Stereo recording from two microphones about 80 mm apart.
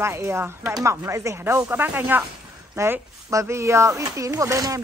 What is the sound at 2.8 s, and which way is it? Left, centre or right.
Speech, right.